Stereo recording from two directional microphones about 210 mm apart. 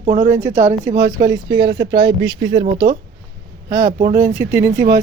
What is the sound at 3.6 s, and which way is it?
Speech, 15° right (ahead or behind).